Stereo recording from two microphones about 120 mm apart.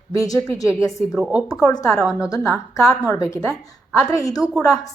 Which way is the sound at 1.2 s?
10° right (ahead or behind).